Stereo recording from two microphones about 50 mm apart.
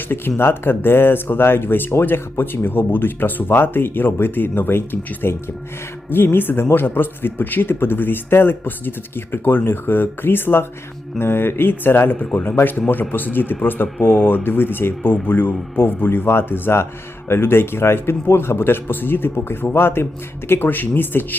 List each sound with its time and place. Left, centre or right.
0.1 s speech: left
12.2 s speech: left